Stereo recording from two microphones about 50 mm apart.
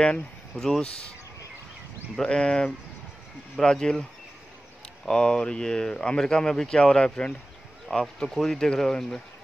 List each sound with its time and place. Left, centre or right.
0.6 s speech: centre
2.1 s speech: centre
5.0 s speech: centre